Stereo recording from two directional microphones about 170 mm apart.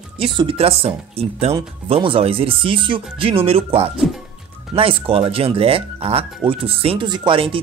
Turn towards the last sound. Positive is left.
turn(degrees=-30)  # may be behind; listen again after turning